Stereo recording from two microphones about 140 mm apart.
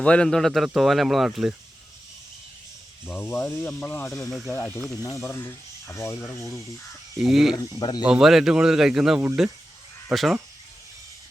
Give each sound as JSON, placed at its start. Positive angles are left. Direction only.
{"t": 0.0, "sound": "speech", "side_deg": 5}
{"t": 3.1, "sound": "speech", "side_deg": 15}
{"t": 4.3, "sound": "speech", "side_deg": 0}
{"t": 4.5, "sound": "speech", "side_deg": 15}
{"t": 7.2, "sound": "speech", "side_deg": 0}
{"t": 7.5, "sound": "speech", "side_deg": 30}
{"t": 8.0, "sound": "speech", "side_deg": -5}